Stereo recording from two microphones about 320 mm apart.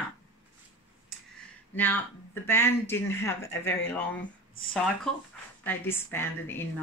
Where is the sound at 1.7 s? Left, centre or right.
Centre.